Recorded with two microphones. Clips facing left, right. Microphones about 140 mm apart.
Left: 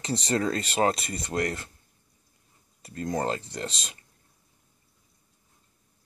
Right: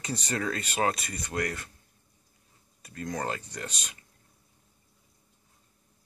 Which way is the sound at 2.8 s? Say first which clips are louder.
Left 5 dB; 30° left (ahead or behind).